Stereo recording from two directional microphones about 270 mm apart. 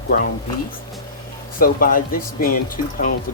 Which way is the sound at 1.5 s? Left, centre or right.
Left.